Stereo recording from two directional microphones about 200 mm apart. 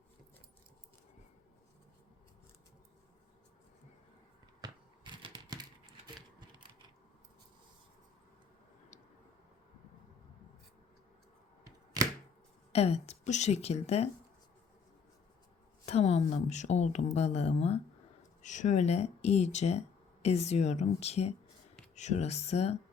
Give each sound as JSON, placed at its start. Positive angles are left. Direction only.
{"t": 4.6, "sound": "a sound", "side_deg": -25}
{"t": 12.7, "sound": "speech", "side_deg": 30}
{"t": 15.9, "sound": "speech", "side_deg": 30}